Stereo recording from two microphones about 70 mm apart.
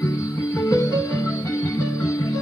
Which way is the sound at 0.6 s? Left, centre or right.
Left.